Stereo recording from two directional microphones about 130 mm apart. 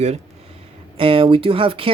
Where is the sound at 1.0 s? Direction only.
45° right (ahead or behind).